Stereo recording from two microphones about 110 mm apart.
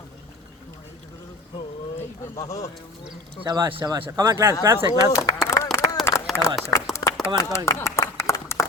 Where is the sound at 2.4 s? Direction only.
30° left (ahead or behind).